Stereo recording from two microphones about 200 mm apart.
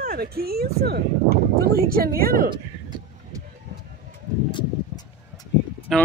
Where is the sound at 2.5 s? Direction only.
20° right (ahead or behind).